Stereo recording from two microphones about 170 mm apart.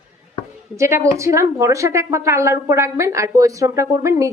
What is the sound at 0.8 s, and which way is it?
A woman's voice, 15° right (ahead or behind).